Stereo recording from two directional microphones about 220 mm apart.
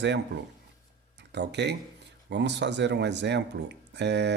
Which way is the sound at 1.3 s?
50° right (ahead or behind).